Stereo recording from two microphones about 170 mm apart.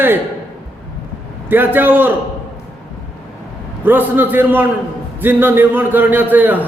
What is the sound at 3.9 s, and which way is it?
A man's voice, 10° right (ahead or behind).